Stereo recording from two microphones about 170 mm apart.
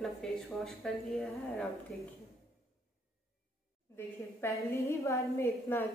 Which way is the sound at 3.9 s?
15° left (ahead or behind).